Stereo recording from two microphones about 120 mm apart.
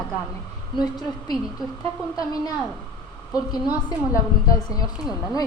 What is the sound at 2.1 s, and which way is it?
Speech, 30° left (ahead or behind).